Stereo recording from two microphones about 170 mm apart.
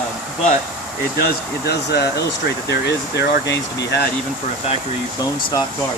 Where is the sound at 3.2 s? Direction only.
90° left.